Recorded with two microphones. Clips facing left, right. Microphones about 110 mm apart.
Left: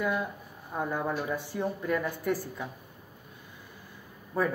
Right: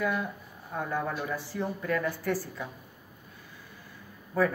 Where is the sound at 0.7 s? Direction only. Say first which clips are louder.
Left 1 dB; 15° left (ahead or behind).